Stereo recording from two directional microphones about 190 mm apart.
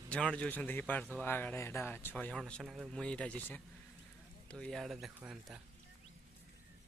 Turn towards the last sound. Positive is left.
turn(degrees=-5)  # may be behind; listen again after turning